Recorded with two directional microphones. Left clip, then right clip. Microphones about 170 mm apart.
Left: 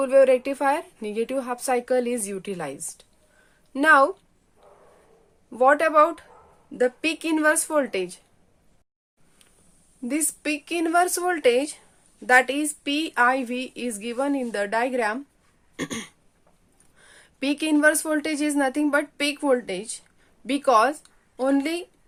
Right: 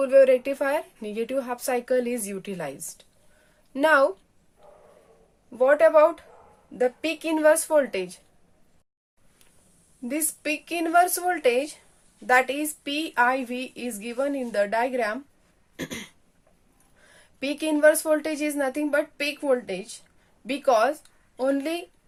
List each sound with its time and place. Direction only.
0.0 s a woman's voice: 25° left (ahead or behind)
5.5 s speech: 35° left (ahead or behind)
10.1 s speech: 30° left (ahead or behind)
15.7 s throat clearing: 35° left (ahead or behind)
17.0 s speech: 35° left (ahead or behind)